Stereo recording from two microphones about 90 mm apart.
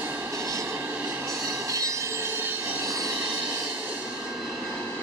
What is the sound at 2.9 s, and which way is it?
Vehicle, 35° right (ahead or behind).